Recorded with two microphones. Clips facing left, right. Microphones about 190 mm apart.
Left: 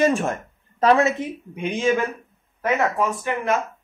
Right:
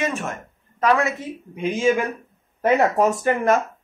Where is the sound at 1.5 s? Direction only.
5° right (ahead or behind).